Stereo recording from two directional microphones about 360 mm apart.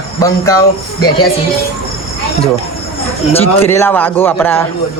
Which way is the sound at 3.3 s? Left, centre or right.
Centre.